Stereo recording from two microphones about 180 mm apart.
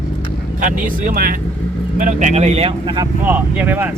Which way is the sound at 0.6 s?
50° right (ahead or behind).